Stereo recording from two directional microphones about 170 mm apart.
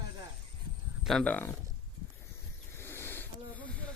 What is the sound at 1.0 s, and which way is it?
Speech, 5° left (ahead or behind).